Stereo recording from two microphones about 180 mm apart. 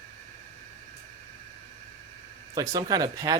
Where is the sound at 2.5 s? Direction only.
20° right (ahead or behind).